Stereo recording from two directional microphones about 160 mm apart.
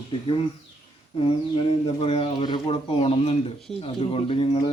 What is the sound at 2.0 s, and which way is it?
Speech, 35° left (ahead or behind).